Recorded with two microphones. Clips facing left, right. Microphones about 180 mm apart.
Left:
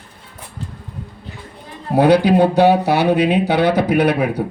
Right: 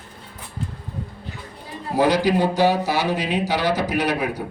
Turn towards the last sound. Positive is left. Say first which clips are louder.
# left 7 dB
turn(degrees=60)  # may be behind; listen again after turning